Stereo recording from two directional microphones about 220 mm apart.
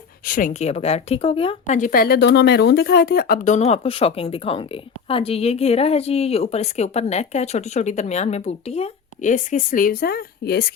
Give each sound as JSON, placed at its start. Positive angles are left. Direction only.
{"t": 0.3, "sound": "speech", "side_deg": 35}